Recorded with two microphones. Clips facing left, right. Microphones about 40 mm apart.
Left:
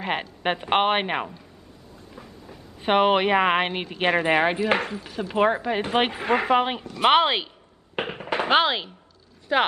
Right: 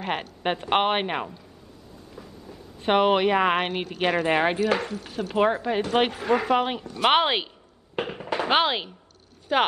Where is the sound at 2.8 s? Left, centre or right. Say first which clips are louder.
Left 1 dB; centre; by 4.3 s left.